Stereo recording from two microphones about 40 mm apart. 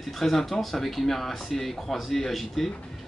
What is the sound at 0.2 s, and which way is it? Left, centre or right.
Speech, centre.